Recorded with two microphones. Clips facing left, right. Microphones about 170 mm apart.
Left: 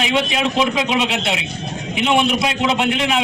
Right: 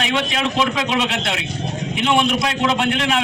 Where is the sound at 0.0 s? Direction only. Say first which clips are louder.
Left 2 dB; 15° left (ahead or behind).